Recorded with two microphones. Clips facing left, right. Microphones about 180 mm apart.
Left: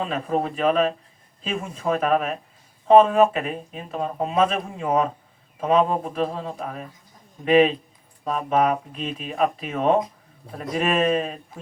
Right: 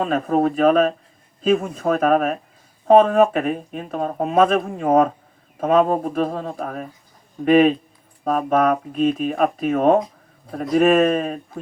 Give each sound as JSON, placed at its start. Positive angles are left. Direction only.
{"t": 0.0, "sound": "speech", "side_deg": -45}